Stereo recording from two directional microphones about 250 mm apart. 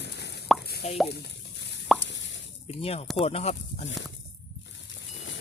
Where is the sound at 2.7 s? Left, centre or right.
Left.